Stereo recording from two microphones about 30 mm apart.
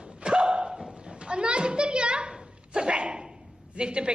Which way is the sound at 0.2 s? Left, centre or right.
Right.